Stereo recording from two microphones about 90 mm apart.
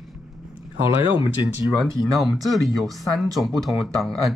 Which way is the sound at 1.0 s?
65° left (ahead or behind).